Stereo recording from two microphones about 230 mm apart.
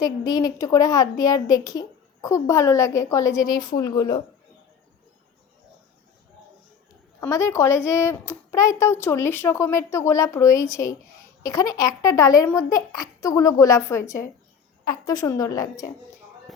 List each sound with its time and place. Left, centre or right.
0.0 s speech: centre
7.2 s speech: centre